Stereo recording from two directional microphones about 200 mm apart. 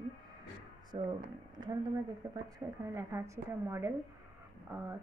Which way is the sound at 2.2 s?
15° right (ahead or behind).